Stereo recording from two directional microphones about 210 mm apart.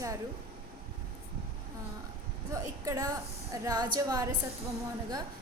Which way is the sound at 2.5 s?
15° right (ahead or behind).